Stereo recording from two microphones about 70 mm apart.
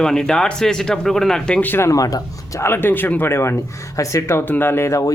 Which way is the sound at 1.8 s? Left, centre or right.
Left.